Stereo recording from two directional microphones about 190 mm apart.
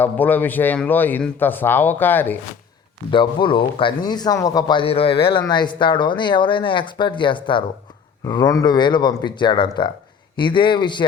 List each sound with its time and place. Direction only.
0.0 s speech: 10° left (ahead or behind)
3.1 s speech: 25° left (ahead or behind)